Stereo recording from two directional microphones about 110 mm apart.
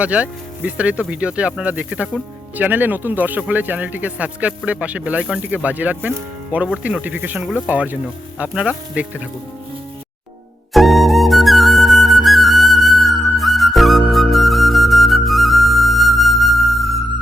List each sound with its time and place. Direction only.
0.0 s speech: 10° right (ahead or behind)
10.8 s flute: centre (ahead or behind)